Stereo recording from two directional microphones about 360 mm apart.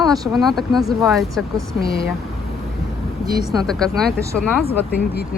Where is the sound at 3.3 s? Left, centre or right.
Centre.